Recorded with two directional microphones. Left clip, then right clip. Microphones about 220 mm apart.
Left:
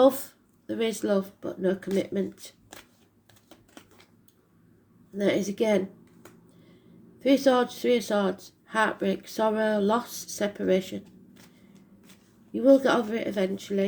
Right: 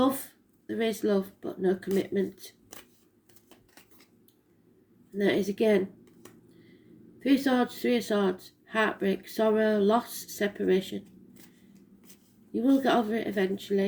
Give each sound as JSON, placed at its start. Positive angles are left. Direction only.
{"t": 0.0, "sound": "speech", "side_deg": 30}
{"t": 5.1, "sound": "speech", "side_deg": 30}
{"t": 7.2, "sound": "speech", "side_deg": 30}
{"t": 12.5, "sound": "speech", "side_deg": 30}